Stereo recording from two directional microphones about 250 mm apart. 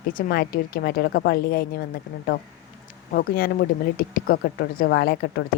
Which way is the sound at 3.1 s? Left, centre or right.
Left.